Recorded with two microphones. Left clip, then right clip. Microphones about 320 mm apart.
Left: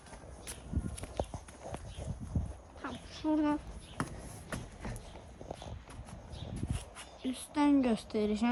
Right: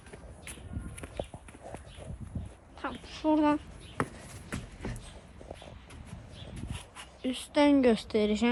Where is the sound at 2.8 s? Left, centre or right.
Centre.